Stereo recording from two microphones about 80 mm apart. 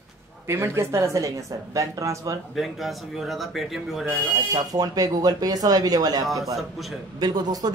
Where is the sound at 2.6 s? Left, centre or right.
Centre.